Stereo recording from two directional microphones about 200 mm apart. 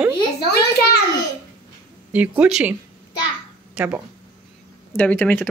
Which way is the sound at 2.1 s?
5° right (ahead or behind).